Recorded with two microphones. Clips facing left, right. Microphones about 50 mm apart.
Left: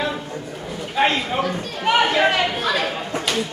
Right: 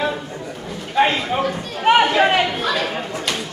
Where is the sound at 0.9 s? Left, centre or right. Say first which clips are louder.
Right 2 dB; centre.